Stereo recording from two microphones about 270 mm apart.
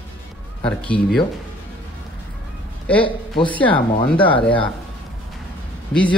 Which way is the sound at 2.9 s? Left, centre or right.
Centre.